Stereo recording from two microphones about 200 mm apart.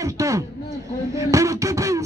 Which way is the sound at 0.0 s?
15° right (ahead or behind).